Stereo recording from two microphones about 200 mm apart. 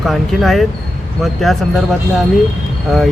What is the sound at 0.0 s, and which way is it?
Speech, centre (ahead or behind).